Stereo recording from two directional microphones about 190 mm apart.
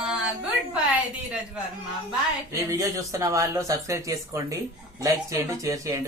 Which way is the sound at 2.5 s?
15° right (ahead or behind).